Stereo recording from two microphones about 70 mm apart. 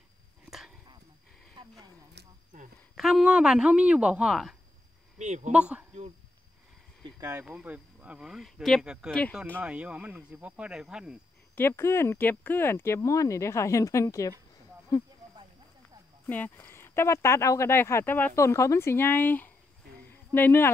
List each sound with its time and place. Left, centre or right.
0.5 s dog: centre
3.0 s speech: centre
5.5 s speech: centre
7.2 s speech: right
7.4 s speech: centre
11.5 s speech: left
13.0 s speech: left
14.9 s speech: left
16.3 s speech: left
16.6 s speech: left
18.0 s speech: left
18.3 s speech: left